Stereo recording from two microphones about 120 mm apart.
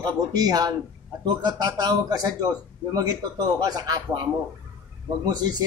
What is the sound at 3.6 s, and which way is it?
Speech, 35° right (ahead or behind).